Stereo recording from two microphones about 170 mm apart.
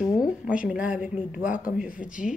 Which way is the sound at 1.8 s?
50° left (ahead or behind).